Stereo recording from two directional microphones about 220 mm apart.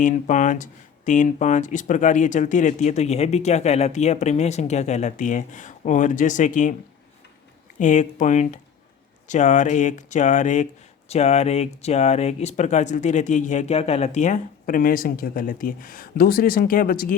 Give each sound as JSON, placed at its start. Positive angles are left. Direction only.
{"t": 0.0, "sound": "speech", "side_deg": 35}
{"t": 7.8, "sound": "speech", "side_deg": 35}